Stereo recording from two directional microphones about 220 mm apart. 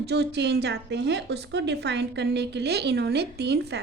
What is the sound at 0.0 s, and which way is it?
A woman's voice, 50° right (ahead or behind).